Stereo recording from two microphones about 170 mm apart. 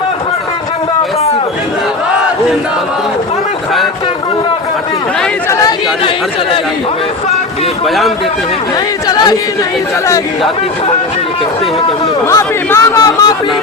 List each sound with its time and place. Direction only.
7.9 s speech: centre (ahead or behind)
9.0 s chatter: 25° left (ahead or behind)
12.3 s speech: 15° left (ahead or behind)